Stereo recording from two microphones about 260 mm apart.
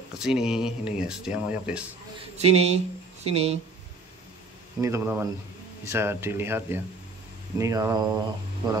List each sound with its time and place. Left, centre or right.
0.2 s speech: centre
2.3 s speech: right
4.7 s speech: centre